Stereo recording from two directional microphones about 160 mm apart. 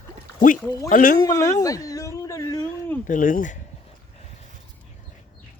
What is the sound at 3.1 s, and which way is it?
Speech, 55° left (ahead or behind).